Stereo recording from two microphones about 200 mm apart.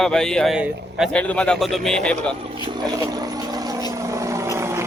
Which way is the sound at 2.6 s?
20° right (ahead or behind).